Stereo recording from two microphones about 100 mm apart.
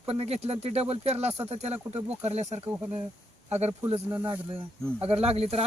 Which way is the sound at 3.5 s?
90° right.